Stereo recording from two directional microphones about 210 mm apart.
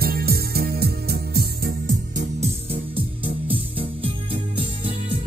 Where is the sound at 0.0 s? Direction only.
45° right (ahead or behind).